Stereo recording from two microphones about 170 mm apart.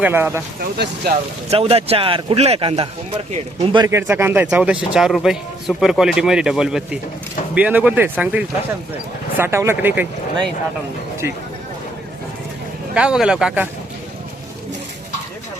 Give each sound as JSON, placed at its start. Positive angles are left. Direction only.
{"t": 0.0, "sound": "speech", "side_deg": -15}
{"t": 0.6, "sound": "speech", "side_deg": -65}
{"t": 1.5, "sound": "speech", "side_deg": -35}
{"t": 3.8, "sound": "speech", "side_deg": -15}
{"t": 12.9, "sound": "speech", "side_deg": -5}